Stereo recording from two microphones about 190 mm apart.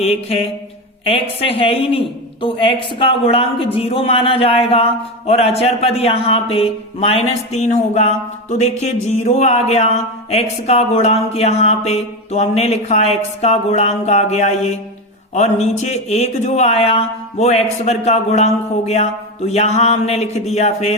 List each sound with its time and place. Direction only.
0.0 s a woman's voice: 30° left (ahead or behind)